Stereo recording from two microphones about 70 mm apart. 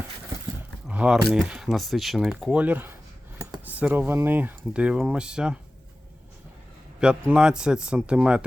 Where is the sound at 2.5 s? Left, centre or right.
Right.